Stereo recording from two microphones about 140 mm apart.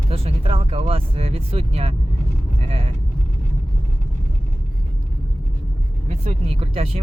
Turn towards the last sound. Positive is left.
turn(degrees=-40)  # may be behind; listen again after turning